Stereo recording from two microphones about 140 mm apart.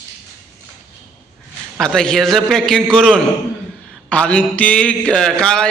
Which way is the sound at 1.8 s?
5° left (ahead or behind).